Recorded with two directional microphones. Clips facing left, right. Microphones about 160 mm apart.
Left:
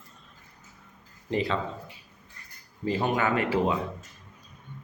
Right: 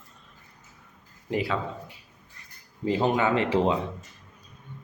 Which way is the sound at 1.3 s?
10° right (ahead or behind).